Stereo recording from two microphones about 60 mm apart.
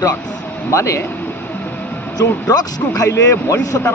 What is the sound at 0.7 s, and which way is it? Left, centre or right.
Speech, left.